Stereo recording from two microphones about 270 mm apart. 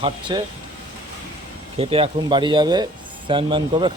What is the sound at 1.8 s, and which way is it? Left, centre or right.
Speech, right.